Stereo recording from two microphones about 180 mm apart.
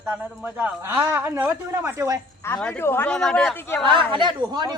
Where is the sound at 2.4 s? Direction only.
10° left (ahead or behind).